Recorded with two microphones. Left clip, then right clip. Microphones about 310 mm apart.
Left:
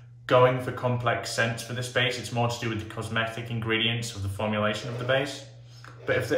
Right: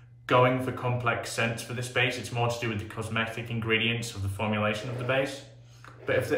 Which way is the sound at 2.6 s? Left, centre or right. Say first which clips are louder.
Left 1 dB; centre.